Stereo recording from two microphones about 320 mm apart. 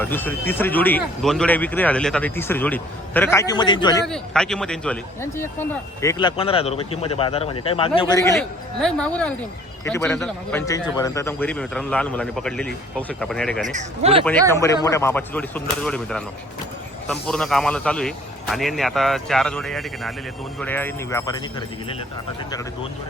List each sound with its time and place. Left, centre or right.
0.0 s speech: centre
4.0 s speech: centre
13.7 s speech: centre
14.5 s speech: centre